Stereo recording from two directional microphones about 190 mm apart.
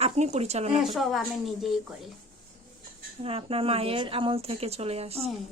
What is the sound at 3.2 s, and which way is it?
A woman's voice, 30° right (ahead or behind).